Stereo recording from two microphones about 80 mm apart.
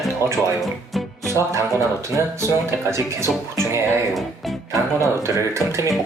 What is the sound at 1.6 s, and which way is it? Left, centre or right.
Speech, right.